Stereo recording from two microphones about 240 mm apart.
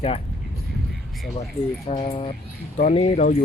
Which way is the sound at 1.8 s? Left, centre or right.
Left.